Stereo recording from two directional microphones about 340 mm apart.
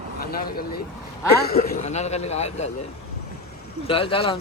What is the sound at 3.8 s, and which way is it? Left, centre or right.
Mantra, centre.